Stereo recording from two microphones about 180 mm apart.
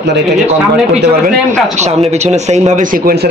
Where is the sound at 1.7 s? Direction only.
40° right (ahead or behind); by 3.3 s 60° right (ahead or behind).